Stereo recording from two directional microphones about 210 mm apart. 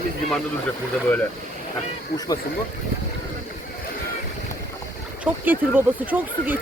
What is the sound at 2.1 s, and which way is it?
Speech, 15° left (ahead or behind).